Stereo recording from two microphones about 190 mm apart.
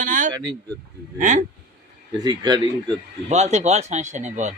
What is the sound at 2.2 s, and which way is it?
Speech, 20° right (ahead or behind).